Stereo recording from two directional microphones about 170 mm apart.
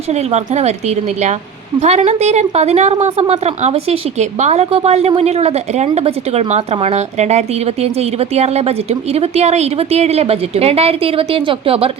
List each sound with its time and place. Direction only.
0.1 s a woman's voice: 40° right (ahead or behind)